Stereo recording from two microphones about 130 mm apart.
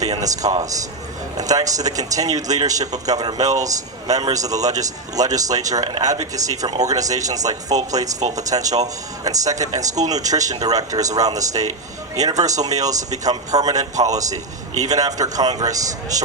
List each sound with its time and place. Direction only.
0.0 s a man's voice: 30° right (ahead or behind)
12.6 s a man's voice: 30° right (ahead or behind)